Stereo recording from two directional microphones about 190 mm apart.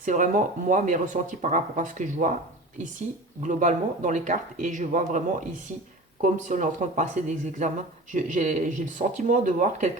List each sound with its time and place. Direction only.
0.0 s speech: 45° right (ahead or behind)
3.4 s speech: 40° right (ahead or behind)